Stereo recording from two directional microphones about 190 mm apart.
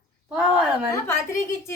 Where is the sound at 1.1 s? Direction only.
15° left (ahead or behind).